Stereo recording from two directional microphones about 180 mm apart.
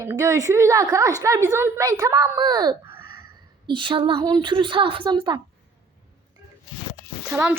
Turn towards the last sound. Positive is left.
turn(degrees=-15)  # may be behind; listen again after turning